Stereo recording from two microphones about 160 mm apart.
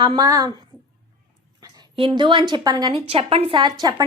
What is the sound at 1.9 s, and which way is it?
A woman's voice, 30° right (ahead or behind).